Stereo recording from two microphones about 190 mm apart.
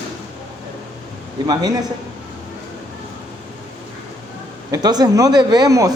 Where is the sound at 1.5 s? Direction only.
20° right (ahead or behind).